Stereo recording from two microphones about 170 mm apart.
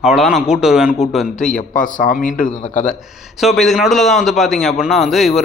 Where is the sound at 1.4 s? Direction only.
50° left (ahead or behind).